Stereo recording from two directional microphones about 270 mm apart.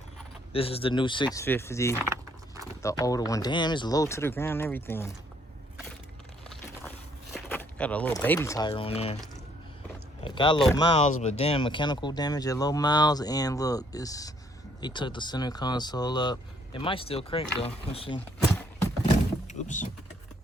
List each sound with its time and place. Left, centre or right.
0.5 s speech: left
7.3 s speech: centre; by 9.1 s left
10.2 s speech: centre
19.5 s power windows: left